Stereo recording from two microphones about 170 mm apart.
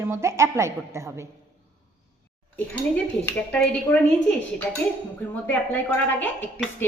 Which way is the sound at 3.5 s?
5° left (ahead or behind).